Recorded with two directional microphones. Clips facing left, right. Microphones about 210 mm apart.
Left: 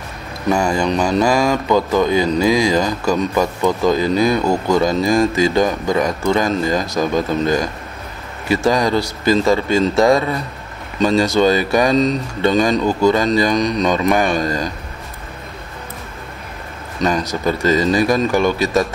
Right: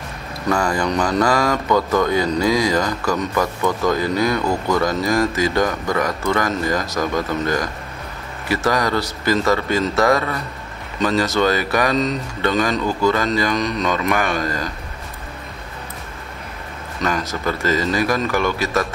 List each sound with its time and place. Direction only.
0.6 s speech: 10° left (ahead or behind)
9.8 s a man's voice: 30° left (ahead or behind)
11.2 s speech: 15° left (ahead or behind)
11.7 s speech: 30° left (ahead or behind)
12.6 s speech: 15° left (ahead or behind)
13.9 s a man's voice: 30° left (ahead or behind)
14.2 s speech: 15° left (ahead or behind)
17.2 s speech: 15° left (ahead or behind)